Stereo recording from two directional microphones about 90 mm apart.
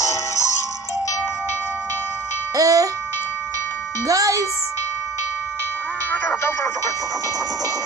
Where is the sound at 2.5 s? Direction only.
40° right (ahead or behind).